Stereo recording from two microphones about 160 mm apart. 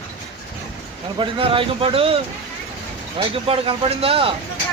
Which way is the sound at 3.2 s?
35° right (ahead or behind).